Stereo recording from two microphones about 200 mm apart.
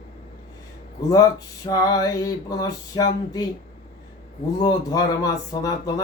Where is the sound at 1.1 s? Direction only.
20° left (ahead or behind).